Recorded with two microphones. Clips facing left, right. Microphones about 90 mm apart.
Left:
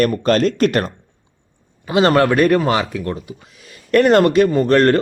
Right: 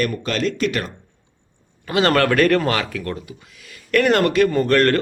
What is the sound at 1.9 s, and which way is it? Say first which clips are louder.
A man's voice: left 3 dB; 20° left (ahead or behind).